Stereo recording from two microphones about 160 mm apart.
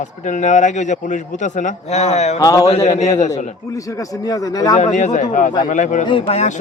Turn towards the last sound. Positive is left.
turn(degrees=45)  # may be behind; listen again after turning